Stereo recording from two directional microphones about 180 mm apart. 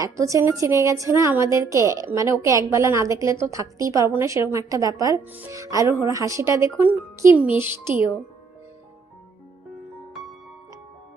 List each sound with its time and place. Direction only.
0.0 s a woman's voice: 15° right (ahead or behind)